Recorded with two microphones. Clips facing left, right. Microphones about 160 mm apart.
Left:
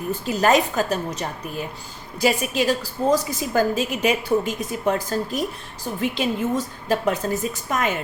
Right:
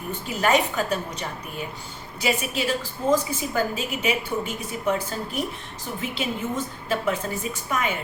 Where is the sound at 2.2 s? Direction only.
40° left (ahead or behind).